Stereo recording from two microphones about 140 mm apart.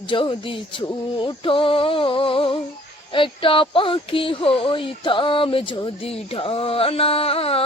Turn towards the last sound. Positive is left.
turn(degrees=45)  # may be behind; listen again after turning